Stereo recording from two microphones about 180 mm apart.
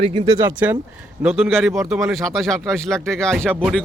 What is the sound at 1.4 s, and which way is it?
Speech, centre (ahead or behind).